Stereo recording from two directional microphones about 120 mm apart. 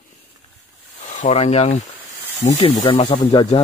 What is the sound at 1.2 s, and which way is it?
Speech, 65° left (ahead or behind).